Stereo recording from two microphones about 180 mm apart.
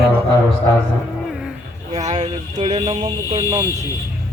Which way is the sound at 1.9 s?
40° right (ahead or behind).